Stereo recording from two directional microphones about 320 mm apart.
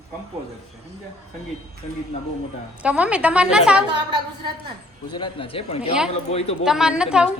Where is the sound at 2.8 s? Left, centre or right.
Centre.